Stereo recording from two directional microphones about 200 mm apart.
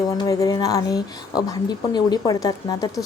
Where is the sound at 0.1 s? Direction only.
15° left (ahead or behind).